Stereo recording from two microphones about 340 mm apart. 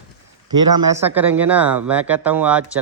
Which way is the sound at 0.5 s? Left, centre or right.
Centre.